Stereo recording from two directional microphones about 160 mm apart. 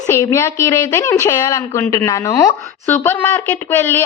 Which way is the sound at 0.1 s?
15° left (ahead or behind).